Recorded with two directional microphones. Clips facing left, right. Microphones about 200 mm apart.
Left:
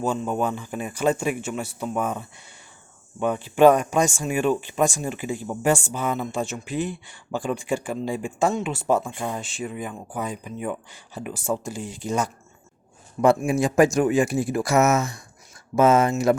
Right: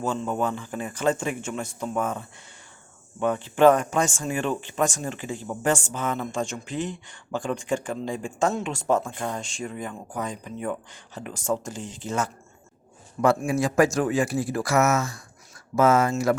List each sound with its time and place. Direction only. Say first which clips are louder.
0.0 s speech: left 2 dB; 15° left (ahead or behind)